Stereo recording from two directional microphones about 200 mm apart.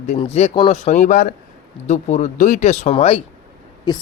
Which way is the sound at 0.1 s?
30° left (ahead or behind).